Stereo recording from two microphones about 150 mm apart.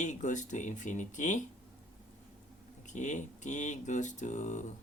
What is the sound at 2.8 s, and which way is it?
Speech, 55° left (ahead or behind).